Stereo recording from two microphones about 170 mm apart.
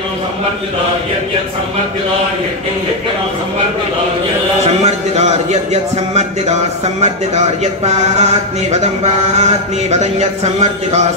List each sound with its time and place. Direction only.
4.8 s speech: 40° right (ahead or behind)